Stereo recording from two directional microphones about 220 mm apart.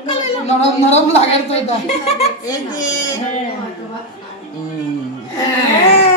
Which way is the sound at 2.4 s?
15° left (ahead or behind).